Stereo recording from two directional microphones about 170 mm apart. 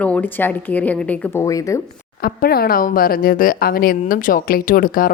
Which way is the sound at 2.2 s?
60° left (ahead or behind).